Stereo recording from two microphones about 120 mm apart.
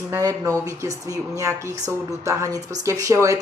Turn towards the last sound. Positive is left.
turn(degrees=-25)  # may be behind; listen again after turning